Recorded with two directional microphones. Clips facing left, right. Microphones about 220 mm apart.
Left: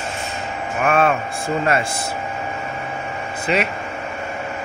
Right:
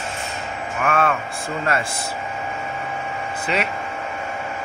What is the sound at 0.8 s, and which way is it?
Hum, 20° left (ahead or behind).